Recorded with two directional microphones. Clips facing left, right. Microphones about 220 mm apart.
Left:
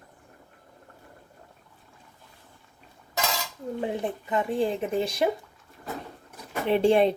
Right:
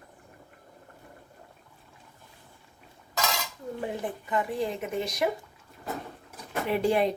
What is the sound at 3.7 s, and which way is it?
Speech, 20° left (ahead or behind).